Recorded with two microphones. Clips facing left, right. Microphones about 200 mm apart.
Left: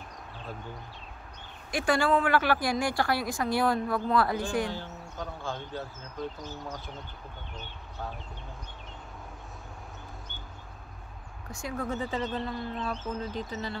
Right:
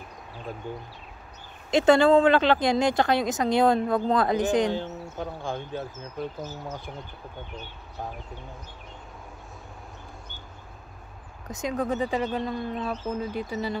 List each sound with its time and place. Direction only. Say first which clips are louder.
1.7 s speech: right 8 dB; 20° right (ahead or behind)
11.4 s speech: right 6 dB; 20° right (ahead or behind)